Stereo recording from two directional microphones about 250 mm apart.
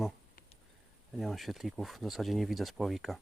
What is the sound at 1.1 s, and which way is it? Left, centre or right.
Speech, centre.